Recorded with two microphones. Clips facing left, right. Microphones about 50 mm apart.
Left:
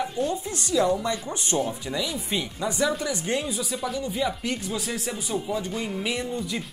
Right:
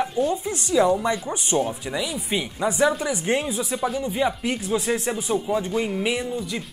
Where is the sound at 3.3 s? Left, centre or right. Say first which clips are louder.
Right 6 dB; right.